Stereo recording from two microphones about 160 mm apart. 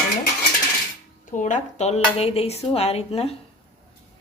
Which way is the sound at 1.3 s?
50° left (ahead or behind).